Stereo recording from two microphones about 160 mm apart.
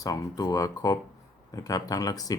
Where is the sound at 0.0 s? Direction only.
20° left (ahead or behind).